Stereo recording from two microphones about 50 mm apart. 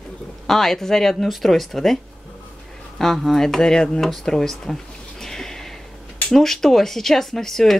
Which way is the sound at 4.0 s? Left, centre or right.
Centre.